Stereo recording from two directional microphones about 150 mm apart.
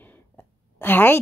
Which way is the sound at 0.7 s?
10° left (ahead or behind).